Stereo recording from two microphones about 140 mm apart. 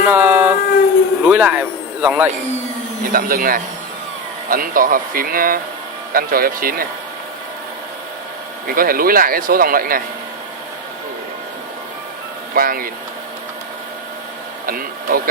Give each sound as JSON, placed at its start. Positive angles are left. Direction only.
{"t": 0.0, "sound": "speech", "side_deg": -10}
{"t": 3.1, "sound": "speech", "side_deg": -90}
{"t": 8.6, "sound": "speech", "side_deg": -90}
{"t": 12.5, "sound": "speech", "side_deg": -90}
{"t": 14.7, "sound": "a sound", "side_deg": -90}